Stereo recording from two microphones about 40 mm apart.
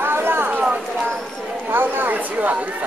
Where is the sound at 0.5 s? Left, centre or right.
Right.